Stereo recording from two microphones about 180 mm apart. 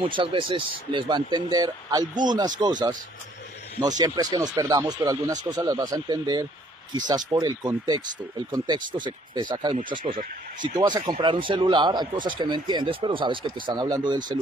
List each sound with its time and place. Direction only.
0.0 s speech: 30° right (ahead or behind)